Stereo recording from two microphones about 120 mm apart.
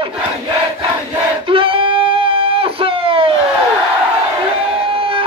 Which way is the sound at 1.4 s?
50° right (ahead or behind).